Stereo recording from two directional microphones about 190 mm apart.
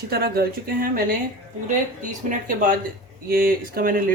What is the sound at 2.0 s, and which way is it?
Speech, 45° right (ahead or behind).